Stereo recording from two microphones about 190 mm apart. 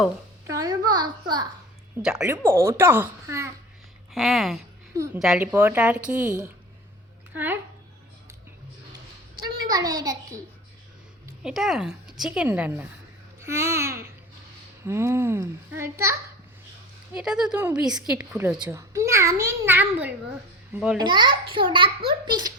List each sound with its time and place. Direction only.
0.4 s babbling: 20° right (ahead or behind)
2.0 s a child's voice: 5° right (ahead or behind)
4.1 s a woman's voice: centre (ahead or behind)
7.3 s a child's voice: 10° right (ahead or behind)
9.3 s a child's voice: 20° right (ahead or behind)
11.4 s a woman's voice: centre (ahead or behind)
17.2 s a woman's voice: 5° right (ahead or behind)
21.0 s a child's voice: 25° right (ahead or behind)